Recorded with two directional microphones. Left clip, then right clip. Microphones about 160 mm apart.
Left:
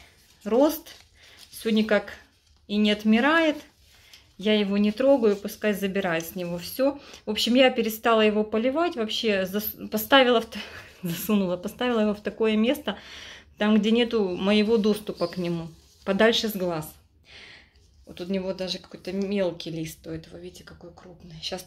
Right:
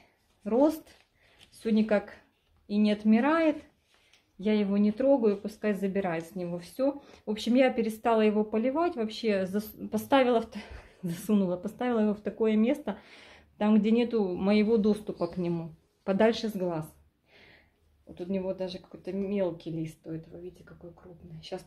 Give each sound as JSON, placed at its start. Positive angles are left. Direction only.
{"t": 0.4, "sound": "speech", "side_deg": 0}
{"t": 17.3, "sound": "a sound", "side_deg": 0}
{"t": 18.1, "sound": "speech", "side_deg": 0}
{"t": 21.4, "sound": "speech", "side_deg": 0}